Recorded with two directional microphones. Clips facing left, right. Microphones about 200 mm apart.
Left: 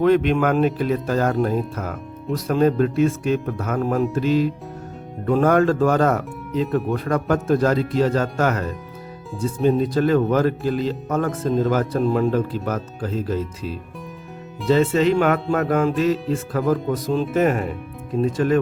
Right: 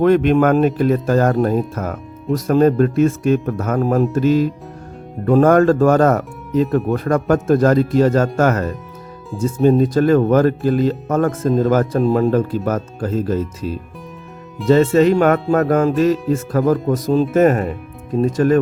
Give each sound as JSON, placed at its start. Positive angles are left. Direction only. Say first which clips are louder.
{"t": 0.0, "sound": "speech", "louder": "right 4 dB", "side_deg": -50}